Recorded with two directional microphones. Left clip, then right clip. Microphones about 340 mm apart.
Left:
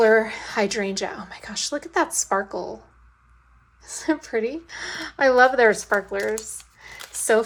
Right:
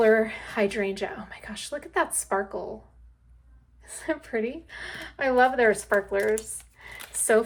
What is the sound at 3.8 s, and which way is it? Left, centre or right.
A woman's voice, centre.